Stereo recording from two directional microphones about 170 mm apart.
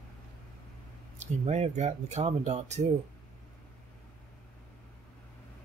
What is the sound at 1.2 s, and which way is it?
Speech, 40° right (ahead or behind).